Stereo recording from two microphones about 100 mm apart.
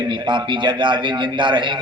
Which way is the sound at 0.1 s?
50° right (ahead or behind).